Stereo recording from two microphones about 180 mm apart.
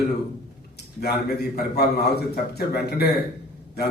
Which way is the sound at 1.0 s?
60° left (ahead or behind).